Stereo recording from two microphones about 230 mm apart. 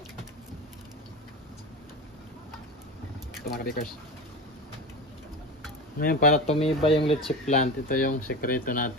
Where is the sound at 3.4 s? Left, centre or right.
Left.